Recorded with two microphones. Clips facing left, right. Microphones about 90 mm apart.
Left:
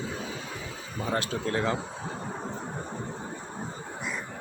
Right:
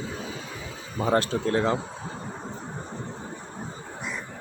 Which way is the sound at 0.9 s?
35° right (ahead or behind).